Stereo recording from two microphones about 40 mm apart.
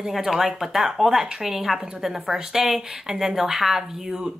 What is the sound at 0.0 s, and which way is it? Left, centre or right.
Speech, centre.